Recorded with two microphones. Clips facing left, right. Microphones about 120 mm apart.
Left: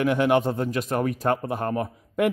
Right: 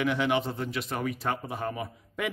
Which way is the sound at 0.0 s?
50° left (ahead or behind).